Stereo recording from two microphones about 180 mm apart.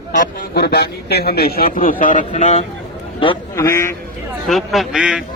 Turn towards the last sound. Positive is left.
turn(degrees=-5)  # may be behind; listen again after turning